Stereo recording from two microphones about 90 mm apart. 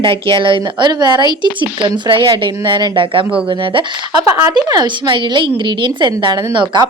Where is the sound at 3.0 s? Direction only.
75° right (ahead or behind).